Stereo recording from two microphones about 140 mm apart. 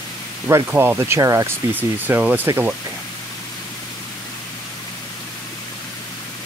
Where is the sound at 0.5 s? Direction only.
20° right (ahead or behind).